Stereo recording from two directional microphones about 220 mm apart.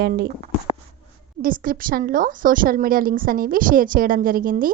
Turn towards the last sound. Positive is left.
turn(degrees=-40)  # may be behind; listen again after turning